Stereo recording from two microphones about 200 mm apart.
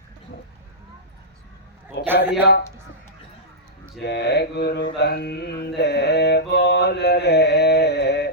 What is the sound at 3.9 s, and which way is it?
Mantra, 55° left (ahead or behind).